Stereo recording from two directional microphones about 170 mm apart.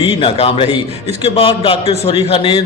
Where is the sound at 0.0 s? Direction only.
35° left (ahead or behind).